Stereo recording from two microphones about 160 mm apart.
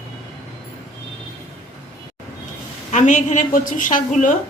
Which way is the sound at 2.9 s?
50° left (ahead or behind).